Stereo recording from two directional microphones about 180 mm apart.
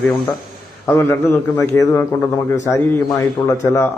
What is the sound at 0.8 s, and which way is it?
A man's voice, 10° left (ahead or behind).